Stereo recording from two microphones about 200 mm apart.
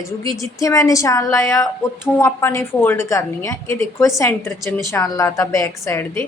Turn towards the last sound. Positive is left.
turn(degrees=15)  # may be behind; listen again after turning